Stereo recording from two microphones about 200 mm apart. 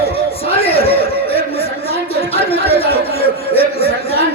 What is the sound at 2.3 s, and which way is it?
Chatter, 30° left (ahead or behind).